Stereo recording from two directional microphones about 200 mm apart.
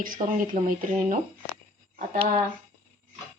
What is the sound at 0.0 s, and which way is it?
Speech, 45° right (ahead or behind).